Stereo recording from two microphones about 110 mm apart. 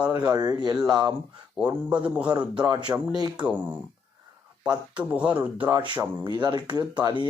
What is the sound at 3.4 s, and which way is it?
Speech, 10° right (ahead or behind).